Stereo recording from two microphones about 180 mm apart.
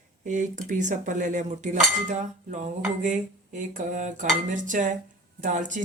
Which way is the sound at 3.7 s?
45° right (ahead or behind).